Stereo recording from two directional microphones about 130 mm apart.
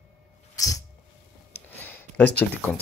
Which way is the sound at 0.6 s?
25° left (ahead or behind).